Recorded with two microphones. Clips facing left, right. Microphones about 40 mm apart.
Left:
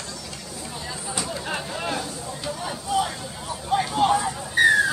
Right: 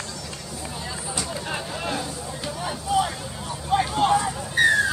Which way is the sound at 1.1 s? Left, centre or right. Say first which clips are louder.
Left 1 dB; centre.